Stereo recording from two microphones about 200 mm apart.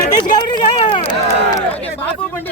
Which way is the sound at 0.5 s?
25° left (ahead or behind).